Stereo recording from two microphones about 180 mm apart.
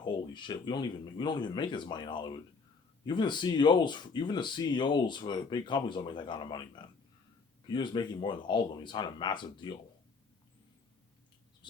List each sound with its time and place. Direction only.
0.0 s speech: 25° left (ahead or behind)